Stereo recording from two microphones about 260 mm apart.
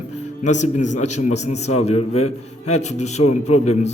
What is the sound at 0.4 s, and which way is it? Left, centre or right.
A man's voice, left.